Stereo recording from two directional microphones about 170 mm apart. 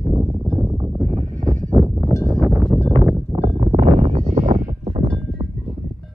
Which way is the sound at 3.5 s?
30° right (ahead or behind).